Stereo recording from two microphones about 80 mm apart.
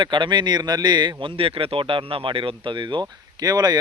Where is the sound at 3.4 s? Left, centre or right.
Right.